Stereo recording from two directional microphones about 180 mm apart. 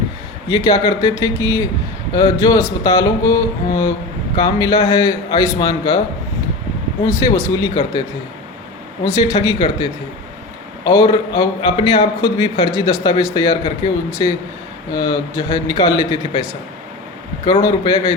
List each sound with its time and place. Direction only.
0.4 s a man's voice: 20° left (ahead or behind)
4.4 s a man's voice: 20° left (ahead or behind)
7.0 s a man's voice: 15° left (ahead or behind)
9.0 s a man's voice: 20° left (ahead or behind)
17.6 s a man's voice: 20° left (ahead or behind)